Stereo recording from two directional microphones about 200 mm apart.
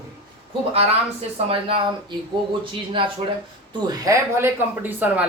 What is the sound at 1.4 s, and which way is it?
Speech, 25° right (ahead or behind).